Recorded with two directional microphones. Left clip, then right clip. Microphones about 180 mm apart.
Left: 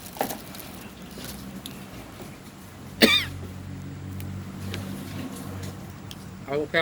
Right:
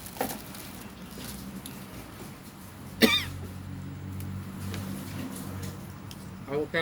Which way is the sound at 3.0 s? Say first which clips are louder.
Left 4 dB; 20° right (ahead or behind).